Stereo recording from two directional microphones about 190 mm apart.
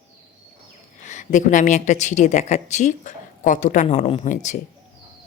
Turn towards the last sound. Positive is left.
turn(degrees=40)  # may be behind; listen again after turning